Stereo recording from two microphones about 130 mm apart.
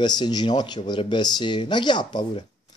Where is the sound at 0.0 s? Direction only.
35° left (ahead or behind).